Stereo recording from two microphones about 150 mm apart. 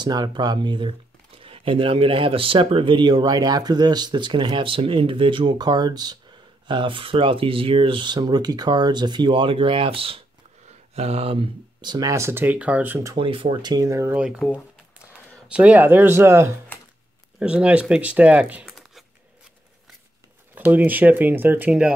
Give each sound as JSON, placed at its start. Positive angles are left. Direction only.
{"t": 0.0, "sound": "speech", "side_deg": -30}
{"t": 13.1, "sound": "speech", "side_deg": -35}
{"t": 14.1, "sound": "speech", "side_deg": -5}
{"t": 17.4, "sound": "speech", "side_deg": -5}
{"t": 20.5, "sound": "speech", "side_deg": -10}